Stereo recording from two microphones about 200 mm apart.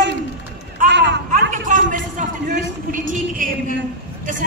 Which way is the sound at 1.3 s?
40° right (ahead or behind).